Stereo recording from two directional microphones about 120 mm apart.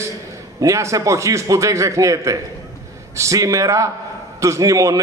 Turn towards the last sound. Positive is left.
turn(degrees=-30)  # may be behind; listen again after turning